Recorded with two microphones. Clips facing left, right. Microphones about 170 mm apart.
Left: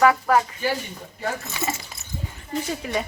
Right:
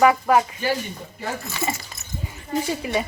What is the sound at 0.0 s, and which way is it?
Speech, 15° right (ahead or behind).